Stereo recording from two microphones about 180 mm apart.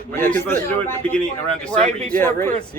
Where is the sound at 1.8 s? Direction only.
40° right (ahead or behind).